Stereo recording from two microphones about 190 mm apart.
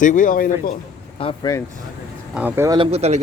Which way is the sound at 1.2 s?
30° left (ahead or behind).